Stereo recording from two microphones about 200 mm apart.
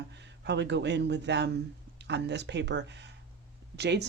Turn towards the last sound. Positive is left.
turn(degrees=-60)  # may be behind; listen again after turning